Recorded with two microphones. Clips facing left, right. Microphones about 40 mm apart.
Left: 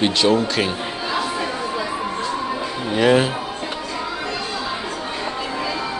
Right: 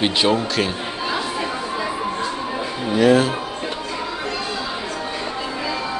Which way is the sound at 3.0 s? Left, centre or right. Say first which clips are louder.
Right 1 dB; left.